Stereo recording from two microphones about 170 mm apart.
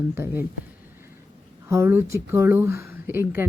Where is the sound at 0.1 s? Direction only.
15° right (ahead or behind).